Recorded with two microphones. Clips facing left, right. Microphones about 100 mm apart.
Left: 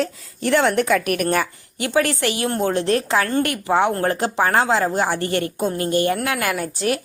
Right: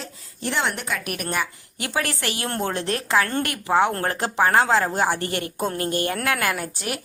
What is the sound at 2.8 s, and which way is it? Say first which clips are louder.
A woman's voice: left 3 dB; 30° left (ahead or behind).